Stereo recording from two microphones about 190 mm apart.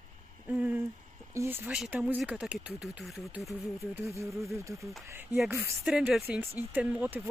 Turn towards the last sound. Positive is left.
turn(degrees=-10)  # may be behind; listen again after turning